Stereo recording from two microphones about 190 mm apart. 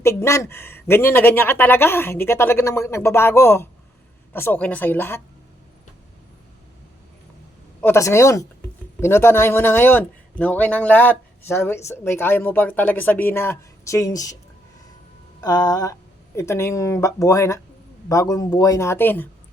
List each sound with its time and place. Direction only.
0.0 s a man's voice: 15° left (ahead or behind)
7.8 s a man's voice: 15° left (ahead or behind)
15.4 s a man's voice: 20° left (ahead or behind)